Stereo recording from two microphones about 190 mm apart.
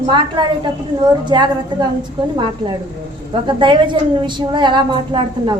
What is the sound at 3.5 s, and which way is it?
A woman's voice, 25° right (ahead or behind).